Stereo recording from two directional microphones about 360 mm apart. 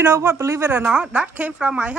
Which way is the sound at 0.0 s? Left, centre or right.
Centre.